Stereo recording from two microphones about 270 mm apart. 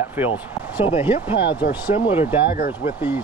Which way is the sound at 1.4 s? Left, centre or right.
Left.